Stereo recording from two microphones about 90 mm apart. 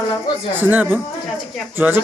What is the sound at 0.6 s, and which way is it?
Speech, 20° right (ahead or behind).